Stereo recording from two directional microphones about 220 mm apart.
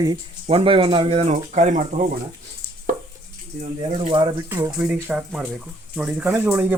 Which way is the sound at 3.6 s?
30° right (ahead or behind).